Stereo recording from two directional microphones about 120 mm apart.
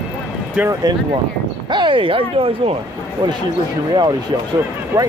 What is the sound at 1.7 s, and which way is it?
Speech, 40° right (ahead or behind).